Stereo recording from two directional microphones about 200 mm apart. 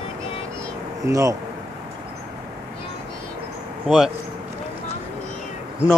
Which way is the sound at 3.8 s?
5° right (ahead or behind).